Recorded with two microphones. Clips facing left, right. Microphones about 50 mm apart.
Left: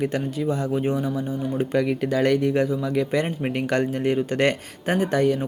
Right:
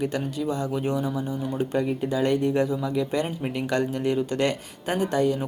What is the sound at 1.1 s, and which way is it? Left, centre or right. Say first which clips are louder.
Speech: left 2 dB; left.